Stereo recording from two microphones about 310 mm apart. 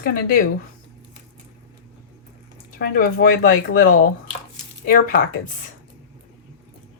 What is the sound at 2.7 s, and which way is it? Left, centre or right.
Speech, left.